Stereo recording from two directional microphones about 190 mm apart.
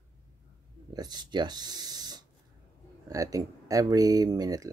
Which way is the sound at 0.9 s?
20° right (ahead or behind).